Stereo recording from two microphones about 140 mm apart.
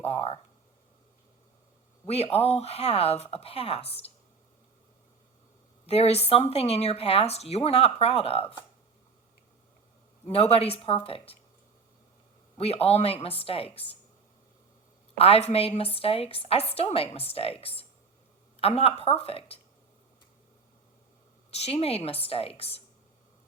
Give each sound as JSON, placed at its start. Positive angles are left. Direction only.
{"t": 0.0, "sound": "speech", "side_deg": 45}
{"t": 2.0, "sound": "speech", "side_deg": 45}
{"t": 5.8, "sound": "speech", "side_deg": 45}
{"t": 10.2, "sound": "speech", "side_deg": 45}
{"t": 12.5, "sound": "speech", "side_deg": 45}
{"t": 15.2, "sound": "speech", "side_deg": 45}
{"t": 21.5, "sound": "speech", "side_deg": 45}